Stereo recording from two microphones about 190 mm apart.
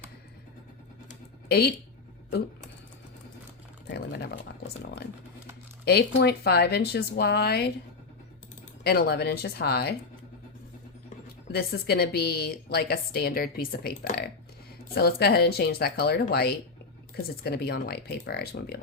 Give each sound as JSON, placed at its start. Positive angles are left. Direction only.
{"t": 1.5, "sound": "a woman's voice", "side_deg": 55}
{"t": 3.8, "sound": "speech", "side_deg": 60}
{"t": 5.8, "sound": "speech", "side_deg": 60}
{"t": 8.8, "sound": "speech", "side_deg": 55}
{"t": 11.5, "sound": "a woman's voice", "side_deg": 55}